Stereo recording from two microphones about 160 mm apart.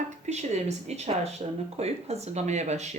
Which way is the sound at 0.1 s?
45° right (ahead or behind).